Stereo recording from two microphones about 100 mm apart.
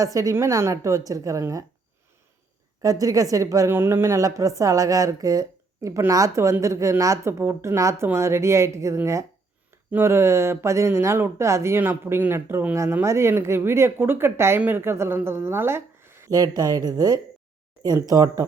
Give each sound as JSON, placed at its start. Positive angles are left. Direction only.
{"t": 0.0, "sound": "speech", "side_deg": -35}
{"t": 2.8, "sound": "speech", "side_deg": -35}
{"t": 3.7, "sound": "a woman's voice", "side_deg": -20}
{"t": 16.3, "sound": "speech", "side_deg": -40}